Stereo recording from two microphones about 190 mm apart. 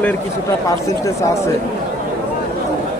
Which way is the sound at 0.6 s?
15° left (ahead or behind).